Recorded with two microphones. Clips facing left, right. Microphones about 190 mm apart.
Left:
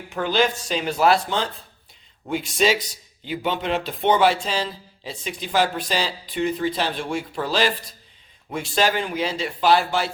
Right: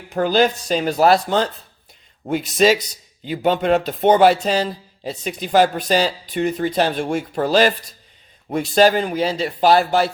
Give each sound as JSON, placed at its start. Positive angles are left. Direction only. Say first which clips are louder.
{"t": 0.1, "sound": "speech", "louder": "right 5 dB", "side_deg": -40}
{"t": 3.2, "sound": "speech", "louder": "right 7 dB", "side_deg": -45}